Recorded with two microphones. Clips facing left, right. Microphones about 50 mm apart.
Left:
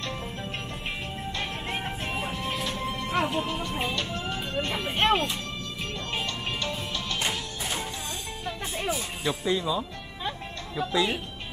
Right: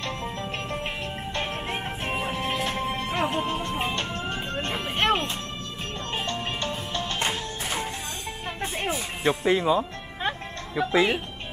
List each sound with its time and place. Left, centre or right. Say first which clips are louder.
2.0 s music: right 6 dB; right
6.2 s music: right 2 dB; right
10.8 s speech: right 4 dB; right